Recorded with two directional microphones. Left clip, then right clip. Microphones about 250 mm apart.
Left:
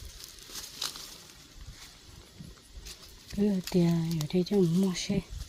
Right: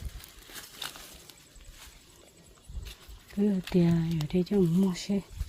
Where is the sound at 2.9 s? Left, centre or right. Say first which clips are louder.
Even; centre.